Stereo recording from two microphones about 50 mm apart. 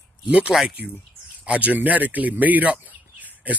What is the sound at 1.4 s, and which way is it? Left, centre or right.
Speech, right.